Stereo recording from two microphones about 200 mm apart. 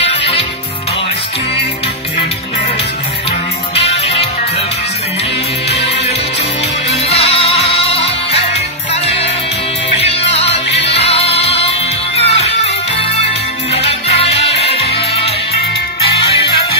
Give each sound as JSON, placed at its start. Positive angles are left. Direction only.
{"t": 0.0, "sound": "music", "side_deg": 30}
{"t": 3.7, "sound": "music", "side_deg": 30}
{"t": 7.2, "sound": "music", "side_deg": 30}